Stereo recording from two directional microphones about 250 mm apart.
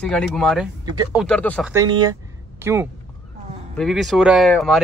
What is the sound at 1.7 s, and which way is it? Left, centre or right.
Speech, centre.